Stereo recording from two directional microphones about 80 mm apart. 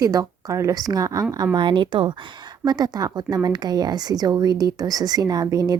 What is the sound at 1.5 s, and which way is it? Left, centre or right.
A woman's voice, right.